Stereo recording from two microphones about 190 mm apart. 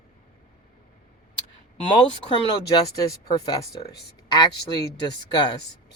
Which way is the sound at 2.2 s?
25° left (ahead or behind).